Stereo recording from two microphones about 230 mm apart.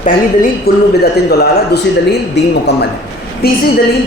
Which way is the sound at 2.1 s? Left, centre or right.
Left.